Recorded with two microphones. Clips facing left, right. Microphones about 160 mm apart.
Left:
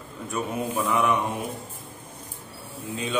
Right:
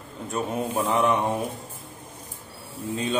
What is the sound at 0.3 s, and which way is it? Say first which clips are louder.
Mantra: right 1 dB; 30° right (ahead or behind).